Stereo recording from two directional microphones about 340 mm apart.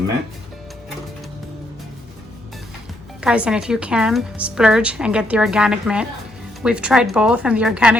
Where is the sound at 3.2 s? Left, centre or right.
Centre.